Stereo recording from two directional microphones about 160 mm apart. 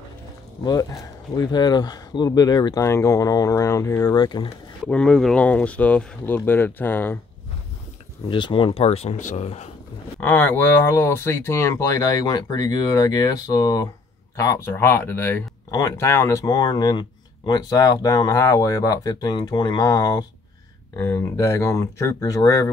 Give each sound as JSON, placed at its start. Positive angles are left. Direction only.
{"t": 0.7, "sound": "speech", "side_deg": 25}
{"t": 4.8, "sound": "speech", "side_deg": 5}
{"t": 8.3, "sound": "speech", "side_deg": 30}
{"t": 10.2, "sound": "speech", "side_deg": 10}
{"t": 20.9, "sound": "speech", "side_deg": 15}